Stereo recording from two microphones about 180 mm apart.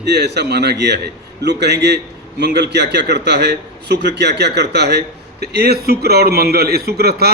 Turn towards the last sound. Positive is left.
turn(degrees=-60)  # may be behind; listen again after turning